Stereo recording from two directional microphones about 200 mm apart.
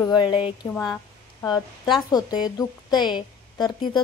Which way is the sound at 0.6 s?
10° left (ahead or behind).